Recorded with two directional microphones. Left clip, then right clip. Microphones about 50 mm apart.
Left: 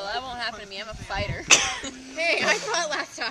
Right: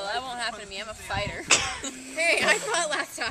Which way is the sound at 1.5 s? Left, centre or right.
Left.